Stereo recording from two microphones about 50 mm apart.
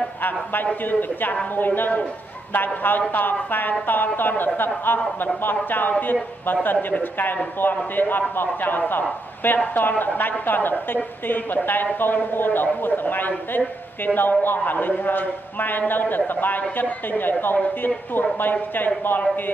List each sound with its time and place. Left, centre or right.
0.2 s a woman's voice: left
1.8 s a woman's voice: left